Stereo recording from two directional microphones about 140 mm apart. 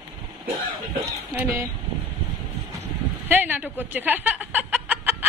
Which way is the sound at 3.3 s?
15° right (ahead or behind).